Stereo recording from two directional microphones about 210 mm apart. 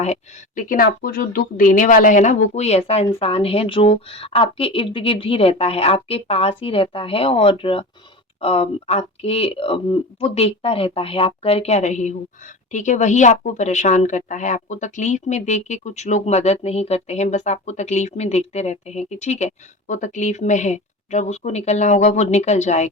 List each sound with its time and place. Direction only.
0.0 s a woman's voice: 35° left (ahead or behind)